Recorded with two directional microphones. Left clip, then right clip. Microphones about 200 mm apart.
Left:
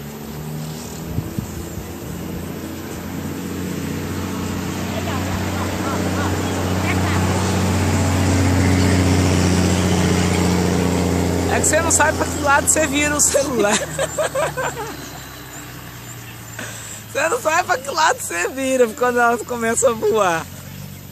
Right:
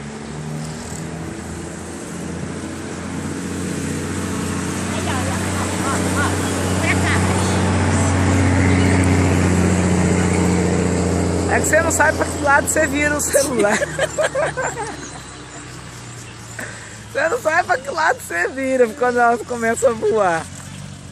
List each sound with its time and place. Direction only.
3.6 s vehicle: 50° right (ahead or behind)
7.2 s vehicle: 25° right (ahead or behind)
8.3 s vehicle: centre (ahead or behind); by 11.4 s 35° left (ahead or behind)
11.7 s speech: 5° left (ahead or behind)
17.1 s speech: 5° left (ahead or behind)
18.6 s speech: 15° left (ahead or behind)